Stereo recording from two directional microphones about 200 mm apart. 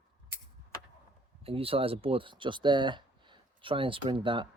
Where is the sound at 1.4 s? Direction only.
30° right (ahead or behind).